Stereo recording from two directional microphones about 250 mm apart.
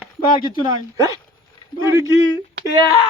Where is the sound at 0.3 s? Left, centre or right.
Centre.